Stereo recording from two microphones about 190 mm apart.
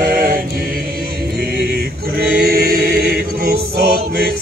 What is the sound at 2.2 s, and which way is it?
Choir, 55° right (ahead or behind).